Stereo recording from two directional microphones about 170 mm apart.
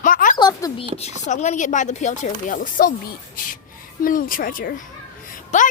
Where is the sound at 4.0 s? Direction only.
55° left (ahead or behind).